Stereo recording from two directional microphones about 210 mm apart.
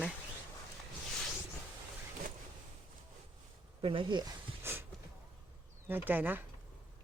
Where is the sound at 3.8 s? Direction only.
25° right (ahead or behind).